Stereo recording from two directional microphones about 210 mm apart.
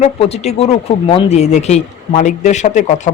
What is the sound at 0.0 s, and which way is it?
A man's voice, 30° left (ahead or behind).